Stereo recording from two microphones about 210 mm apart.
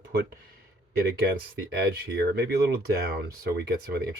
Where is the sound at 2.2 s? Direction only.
50° right (ahead or behind).